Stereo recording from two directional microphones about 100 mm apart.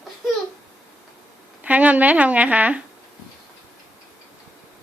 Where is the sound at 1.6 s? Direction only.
15° right (ahead or behind).